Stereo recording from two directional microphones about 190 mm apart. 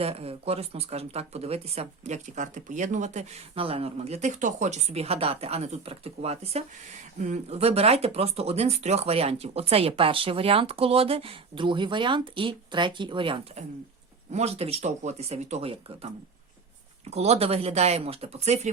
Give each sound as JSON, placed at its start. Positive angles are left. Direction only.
{"t": 0.0, "sound": "speech", "side_deg": -30}
{"t": 17.1, "sound": "speech", "side_deg": -35}